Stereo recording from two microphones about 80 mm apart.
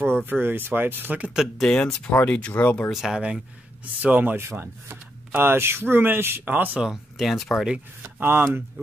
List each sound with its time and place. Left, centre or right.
0.3 s speech: right
1.3 s speech: centre
1.7 s speech: centre
2.9 s speech: centre
4.0 s speech: right
4.4 s speech: right
6.8 s speech: centre
8.0 s speech: right